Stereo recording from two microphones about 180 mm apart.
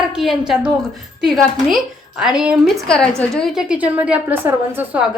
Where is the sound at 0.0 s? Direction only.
5° right (ahead or behind).